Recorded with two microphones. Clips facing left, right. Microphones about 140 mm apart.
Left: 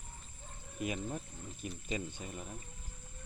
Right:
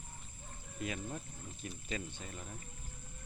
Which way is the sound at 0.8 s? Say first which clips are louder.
Left 3 dB; 15° left (ahead or behind).